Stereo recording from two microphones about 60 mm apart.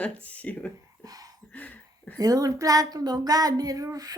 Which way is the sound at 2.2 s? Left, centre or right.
Right.